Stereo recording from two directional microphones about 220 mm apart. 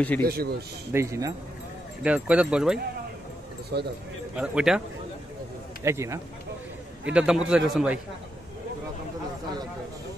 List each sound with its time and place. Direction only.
0.2 s a man's voice: 45° right (ahead or behind)
0.9 s a man's voice: 15° right (ahead or behind)
3.7 s a man's voice: 45° right (ahead or behind)
4.4 s a man's voice: 5° right (ahead or behind)
5.9 s a man's voice: 15° right (ahead or behind)